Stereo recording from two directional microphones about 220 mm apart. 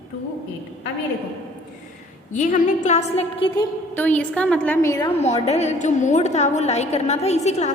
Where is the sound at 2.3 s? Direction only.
35° left (ahead or behind).